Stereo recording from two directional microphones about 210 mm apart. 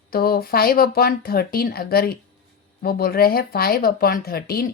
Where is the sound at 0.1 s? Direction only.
45° left (ahead or behind).